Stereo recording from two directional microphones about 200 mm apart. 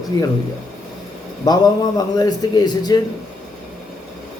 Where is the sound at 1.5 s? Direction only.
20° left (ahead or behind).